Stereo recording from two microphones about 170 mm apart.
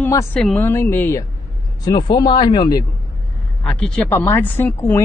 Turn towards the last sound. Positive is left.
turn(degrees=10)  # may be behind; listen again after turning